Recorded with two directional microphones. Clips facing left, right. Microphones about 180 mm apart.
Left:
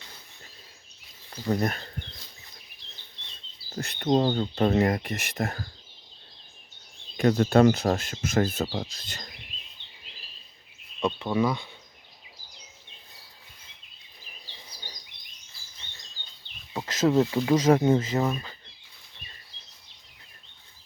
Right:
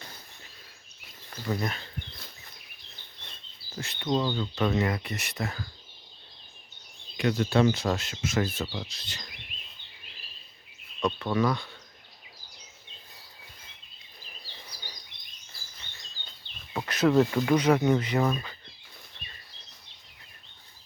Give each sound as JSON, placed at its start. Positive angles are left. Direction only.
{"t": 1.5, "sound": "speech", "side_deg": 45}
{"t": 4.0, "sound": "speech", "side_deg": 45}
{"t": 7.2, "sound": "speech", "side_deg": 45}
{"t": 11.0, "sound": "speech", "side_deg": 15}
{"t": 16.7, "sound": "a sound", "side_deg": 25}
{"t": 17.3, "sound": "speech", "side_deg": 20}
{"t": 17.6, "sound": "speech", "side_deg": 40}
{"t": 17.8, "sound": "speech", "side_deg": 25}